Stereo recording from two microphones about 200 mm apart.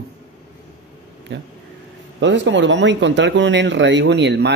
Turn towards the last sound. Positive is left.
turn(degrees=-60)  # may be behind; listen again after turning